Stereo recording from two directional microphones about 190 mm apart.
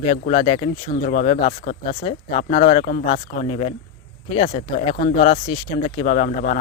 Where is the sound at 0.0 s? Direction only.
30° left (ahead or behind).